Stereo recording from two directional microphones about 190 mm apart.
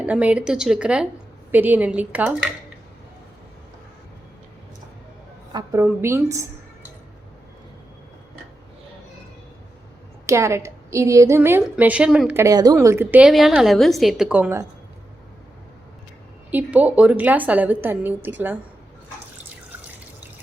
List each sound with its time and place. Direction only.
0.0 s a woman's voice: 5° right (ahead or behind)
5.5 s a woman's voice: 20° right (ahead or behind)
10.2 s a woman's voice: 15° right (ahead or behind)
16.5 s a woman's voice: 10° right (ahead or behind)